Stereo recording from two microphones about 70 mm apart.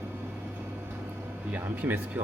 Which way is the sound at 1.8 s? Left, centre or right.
Right.